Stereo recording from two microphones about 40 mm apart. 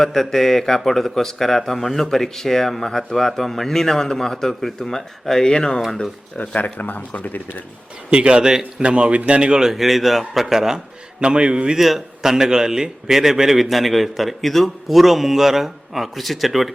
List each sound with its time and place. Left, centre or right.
0.0 s speech: centre
6.7 s speech: left
8.1 s a man's voice: right
9.7 s a man's voice: centre
11.2 s a man's voice: right
11.8 s a man's voice: centre